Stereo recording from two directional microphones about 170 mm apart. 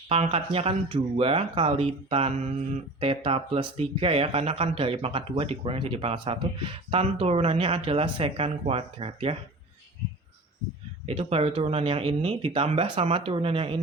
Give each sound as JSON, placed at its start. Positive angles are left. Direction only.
{"t": 0.1, "sound": "speech", "side_deg": -35}
{"t": 11.0, "sound": "speech", "side_deg": -35}